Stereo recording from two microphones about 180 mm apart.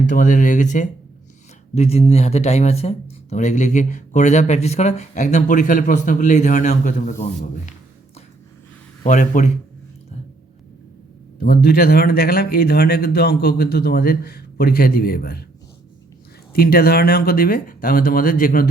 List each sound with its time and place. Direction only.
0.1 s speech: 45° left (ahead or behind)
9.0 s speech: 45° left (ahead or behind)
11.3 s speech: 55° left (ahead or behind)
16.5 s speech: 55° left (ahead or behind)